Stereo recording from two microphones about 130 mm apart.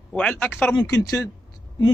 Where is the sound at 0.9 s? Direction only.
25° left (ahead or behind).